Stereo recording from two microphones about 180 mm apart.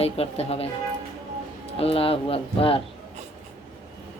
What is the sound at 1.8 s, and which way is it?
Speech, 30° left (ahead or behind).